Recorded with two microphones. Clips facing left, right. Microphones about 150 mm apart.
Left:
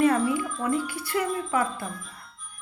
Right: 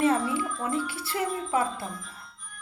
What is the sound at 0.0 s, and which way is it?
Music, 25° right (ahead or behind).